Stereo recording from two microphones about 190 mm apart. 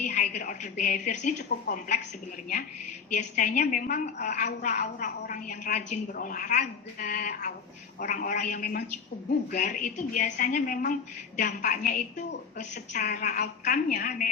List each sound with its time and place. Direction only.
0.0 s a woman's voice: 40° left (ahead or behind)
1.4 s a woman's voice: 60° left (ahead or behind)
1.7 s a woman's voice: 40° left (ahead or behind)
3.1 s a woman's voice: 40° left (ahead or behind)